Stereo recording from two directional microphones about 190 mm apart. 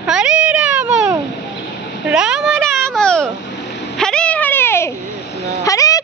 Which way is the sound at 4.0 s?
5° left (ahead or behind).